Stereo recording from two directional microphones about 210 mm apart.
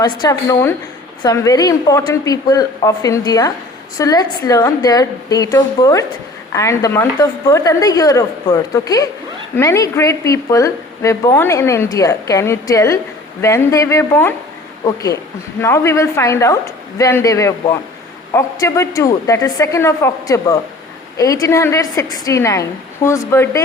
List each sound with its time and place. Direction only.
0.0 s a woman's voice: 20° left (ahead or behind)